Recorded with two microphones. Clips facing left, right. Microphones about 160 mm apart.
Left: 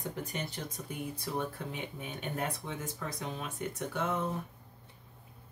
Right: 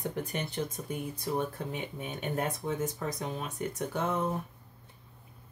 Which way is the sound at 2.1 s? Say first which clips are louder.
Right 4 dB; 45° right (ahead or behind).